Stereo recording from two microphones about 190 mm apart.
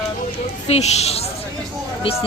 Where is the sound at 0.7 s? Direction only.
35° left (ahead or behind).